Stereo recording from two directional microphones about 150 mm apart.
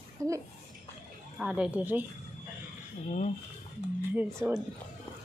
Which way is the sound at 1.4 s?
5° right (ahead or behind).